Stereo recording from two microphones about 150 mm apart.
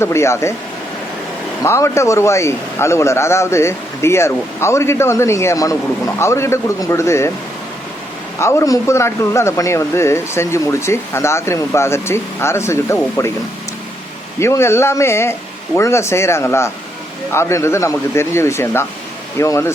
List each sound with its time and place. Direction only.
0.0 s speech: 20° left (ahead or behind)
1.6 s speech: 20° left (ahead or behind)
8.4 s a man's voice: 20° left (ahead or behind)
14.3 s a man's voice: 20° left (ahead or behind)